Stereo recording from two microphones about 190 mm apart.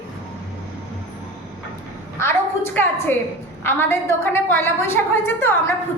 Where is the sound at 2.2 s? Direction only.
10° left (ahead or behind).